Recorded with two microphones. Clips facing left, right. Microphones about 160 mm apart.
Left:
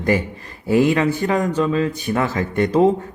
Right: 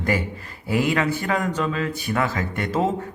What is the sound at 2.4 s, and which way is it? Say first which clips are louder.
Speech: left 7 dB; 35° left (ahead or behind).